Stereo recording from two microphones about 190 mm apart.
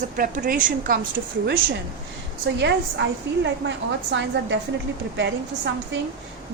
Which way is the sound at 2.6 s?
65° right (ahead or behind).